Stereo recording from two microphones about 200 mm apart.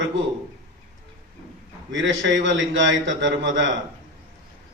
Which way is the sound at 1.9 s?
70° right (ahead or behind).